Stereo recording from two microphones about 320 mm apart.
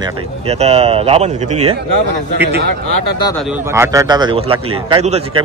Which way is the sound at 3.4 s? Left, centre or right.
Centre.